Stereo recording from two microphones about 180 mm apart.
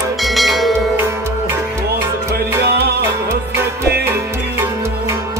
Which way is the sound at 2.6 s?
65° right (ahead or behind).